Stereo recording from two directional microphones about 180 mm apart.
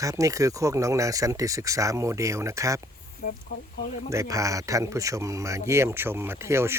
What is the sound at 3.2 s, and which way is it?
Speech, 50° left (ahead or behind).